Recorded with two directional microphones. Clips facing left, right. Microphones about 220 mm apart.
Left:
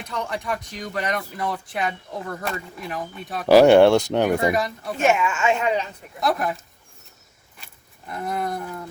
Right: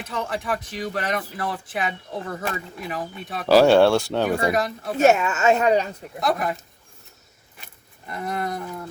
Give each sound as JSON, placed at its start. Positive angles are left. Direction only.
{"t": 0.0, "sound": "speech", "side_deg": 0}
{"t": 3.4, "sound": "speech", "side_deg": 15}
{"t": 4.5, "sound": "speech", "side_deg": 0}
{"t": 5.0, "sound": "speech", "side_deg": -40}
{"t": 6.1, "sound": "speech", "side_deg": 0}
{"t": 8.0, "sound": "speech", "side_deg": 0}